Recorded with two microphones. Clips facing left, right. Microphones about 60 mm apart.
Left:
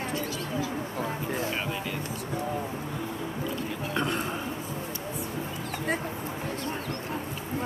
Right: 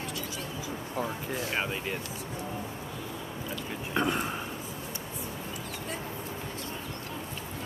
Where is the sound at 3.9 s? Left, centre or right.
Centre.